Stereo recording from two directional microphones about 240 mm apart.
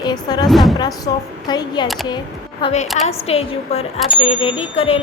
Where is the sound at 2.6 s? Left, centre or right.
Left.